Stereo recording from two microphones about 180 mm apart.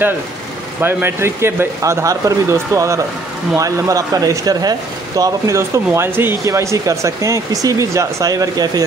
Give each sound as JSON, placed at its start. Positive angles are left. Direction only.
{"t": 0.7, "sound": "speech", "side_deg": -10}